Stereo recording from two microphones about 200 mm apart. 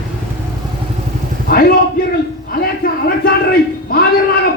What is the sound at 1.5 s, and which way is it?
Speech, 50° left (ahead or behind).